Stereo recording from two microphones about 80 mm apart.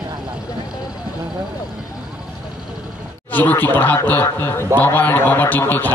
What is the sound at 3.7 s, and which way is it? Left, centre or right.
Speech, left.